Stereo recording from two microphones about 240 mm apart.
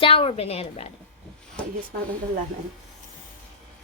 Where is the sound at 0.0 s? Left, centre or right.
Left.